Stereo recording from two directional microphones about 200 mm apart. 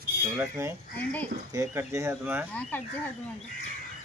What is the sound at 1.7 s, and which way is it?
Speech, 15° right (ahead or behind).